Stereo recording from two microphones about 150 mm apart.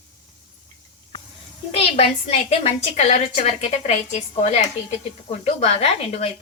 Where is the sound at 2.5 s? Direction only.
45° left (ahead or behind).